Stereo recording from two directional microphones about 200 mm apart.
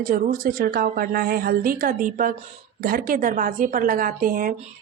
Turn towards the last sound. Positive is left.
turn(degrees=-45)  # may be behind; listen again after turning